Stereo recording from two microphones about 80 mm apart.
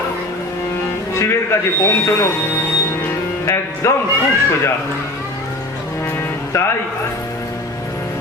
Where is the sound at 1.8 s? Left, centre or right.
Left.